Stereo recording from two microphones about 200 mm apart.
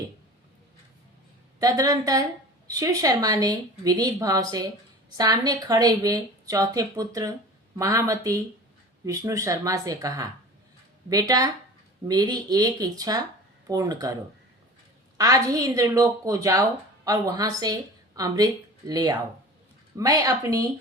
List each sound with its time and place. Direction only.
1.5 s a woman's voice: 20° right (ahead or behind)
15.2 s a woman's voice: 20° right (ahead or behind)